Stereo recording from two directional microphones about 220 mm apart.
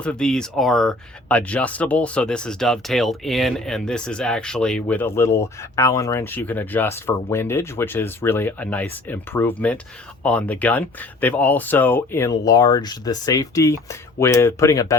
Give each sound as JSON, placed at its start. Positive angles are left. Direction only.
{"t": 0.0, "sound": "speech", "side_deg": 5}